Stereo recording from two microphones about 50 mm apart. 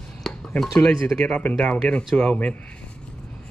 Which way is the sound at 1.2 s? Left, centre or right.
Centre.